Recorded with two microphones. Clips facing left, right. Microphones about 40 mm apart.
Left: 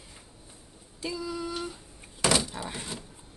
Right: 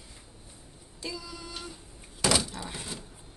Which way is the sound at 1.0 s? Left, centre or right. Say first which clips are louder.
Left 6 dB; centre.